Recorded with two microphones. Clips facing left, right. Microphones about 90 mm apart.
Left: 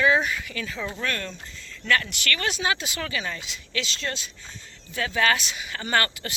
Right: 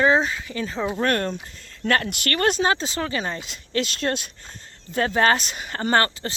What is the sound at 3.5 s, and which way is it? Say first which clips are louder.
Speech: right 6 dB; 45° right (ahead or behind).